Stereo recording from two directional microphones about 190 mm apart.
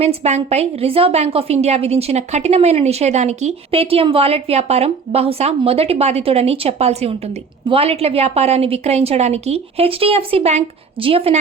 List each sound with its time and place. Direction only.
0.0 s a woman's voice: 35° right (ahead or behind)